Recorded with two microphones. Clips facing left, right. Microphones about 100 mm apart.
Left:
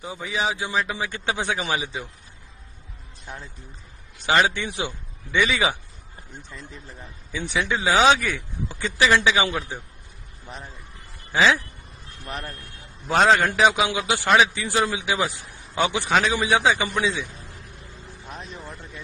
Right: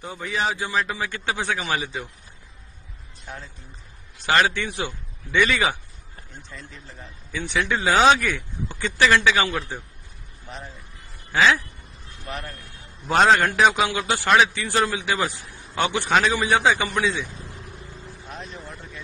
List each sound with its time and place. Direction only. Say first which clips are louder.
0.0 s a man's voice: even; 5° left (ahead or behind)
4.3 s a man's voice: even; 15° left (ahead or behind)
6.9 s a man's voice: right 1 dB; 10° left (ahead or behind)
13.1 s a man's voice: right 1 dB; centre (ahead or behind)
13.5 s a man's voice: even; 10° left (ahead or behind)
14.3 s a man's voice: even; 5° left (ahead or behind)
18.4 s vehicle: even; centre (ahead or behind)